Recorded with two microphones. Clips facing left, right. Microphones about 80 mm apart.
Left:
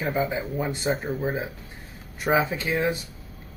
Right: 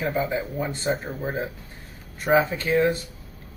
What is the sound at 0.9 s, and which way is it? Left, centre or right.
Speech, centre.